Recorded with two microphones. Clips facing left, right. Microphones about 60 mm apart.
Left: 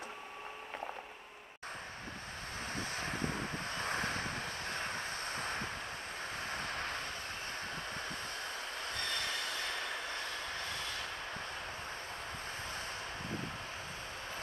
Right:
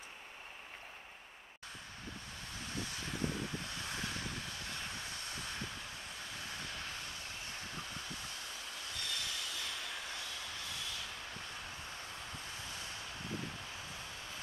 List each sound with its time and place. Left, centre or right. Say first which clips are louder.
2.7 s vehicle: left 3 dB; left
7.7 s train: left 4 dB; left